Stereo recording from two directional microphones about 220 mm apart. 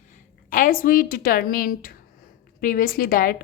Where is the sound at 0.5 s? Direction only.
40° left (ahead or behind).